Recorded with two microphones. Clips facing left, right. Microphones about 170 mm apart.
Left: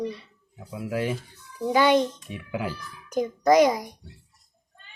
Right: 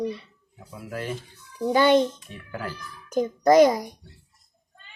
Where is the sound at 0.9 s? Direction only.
10° left (ahead or behind).